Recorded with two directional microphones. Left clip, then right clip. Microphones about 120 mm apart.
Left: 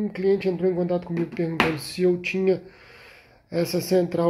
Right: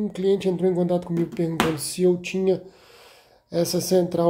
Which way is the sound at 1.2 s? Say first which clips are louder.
Even; 25° right (ahead or behind).